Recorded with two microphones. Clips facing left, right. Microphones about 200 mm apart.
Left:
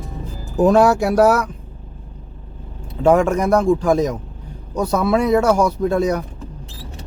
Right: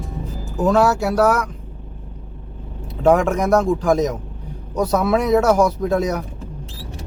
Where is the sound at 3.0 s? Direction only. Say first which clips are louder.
Left 1 dB; centre (ahead or behind).